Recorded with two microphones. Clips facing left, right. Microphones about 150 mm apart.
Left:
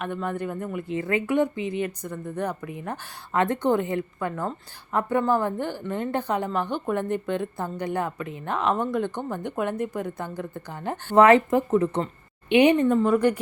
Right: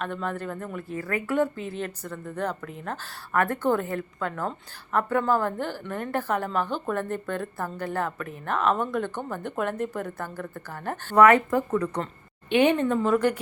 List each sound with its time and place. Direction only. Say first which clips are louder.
0.0 s speech: left 2 dB; 10° left (ahead or behind)